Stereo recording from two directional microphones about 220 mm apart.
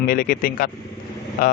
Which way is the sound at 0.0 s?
40° left (ahead or behind).